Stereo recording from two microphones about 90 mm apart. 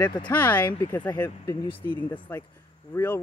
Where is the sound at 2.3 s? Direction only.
30° left (ahead or behind).